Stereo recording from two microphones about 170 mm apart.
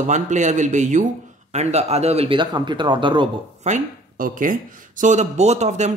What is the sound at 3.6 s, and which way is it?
Speech, 50° right (ahead or behind).